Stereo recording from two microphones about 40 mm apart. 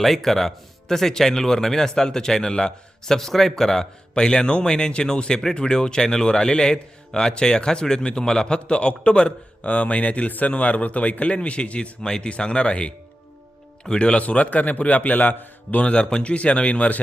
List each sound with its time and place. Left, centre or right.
0.0 s speech: centre
4.1 s a man's voice: left
14.3 s a man's voice: left